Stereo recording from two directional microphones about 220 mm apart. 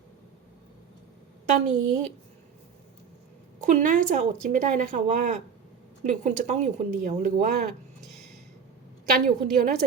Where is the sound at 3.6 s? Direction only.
35° right (ahead or behind).